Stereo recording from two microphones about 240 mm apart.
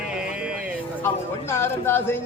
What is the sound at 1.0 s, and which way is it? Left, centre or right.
Speech, centre.